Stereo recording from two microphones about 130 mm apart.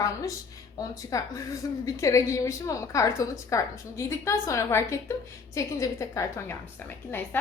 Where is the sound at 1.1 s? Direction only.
25° left (ahead or behind).